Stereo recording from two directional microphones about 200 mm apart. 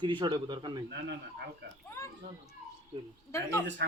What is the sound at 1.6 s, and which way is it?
Speech, 55° right (ahead or behind).